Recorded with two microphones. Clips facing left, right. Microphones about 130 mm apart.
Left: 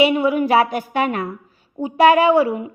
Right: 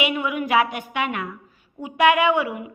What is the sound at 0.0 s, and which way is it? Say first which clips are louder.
A woman's voice: left 8 dB; 35° left (ahead or behind).